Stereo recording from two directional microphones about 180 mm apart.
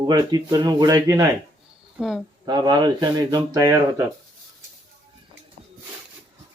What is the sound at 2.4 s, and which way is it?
Speech, 25° right (ahead or behind).